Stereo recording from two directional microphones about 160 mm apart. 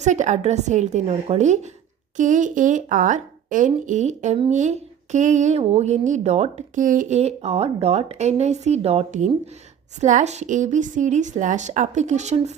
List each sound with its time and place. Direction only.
0.0 s speech: 50° right (ahead or behind)